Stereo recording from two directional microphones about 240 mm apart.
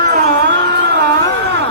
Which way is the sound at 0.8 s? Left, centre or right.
Right.